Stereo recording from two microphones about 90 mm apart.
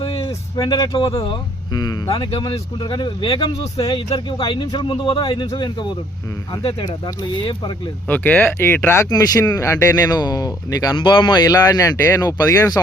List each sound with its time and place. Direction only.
0.3 s a sound: 45° left (ahead or behind)
0.9 s speech: 70° left (ahead or behind); by 2.0 s 50° left (ahead or behind)
2.5 s speech: 60° left (ahead or behind)
8.0 s speech: 20° left (ahead or behind)
9.0 s speech: 45° left (ahead or behind)
10.9 s speech: 65° left (ahead or behind)
11.4 s speech: 40° left (ahead or behind)